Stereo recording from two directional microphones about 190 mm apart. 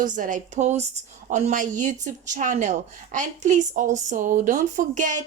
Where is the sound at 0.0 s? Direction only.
45° right (ahead or behind).